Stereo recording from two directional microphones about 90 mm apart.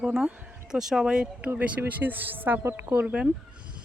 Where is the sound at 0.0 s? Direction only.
10° right (ahead or behind).